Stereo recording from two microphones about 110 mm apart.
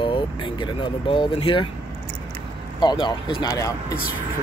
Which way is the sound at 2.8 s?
40° left (ahead or behind).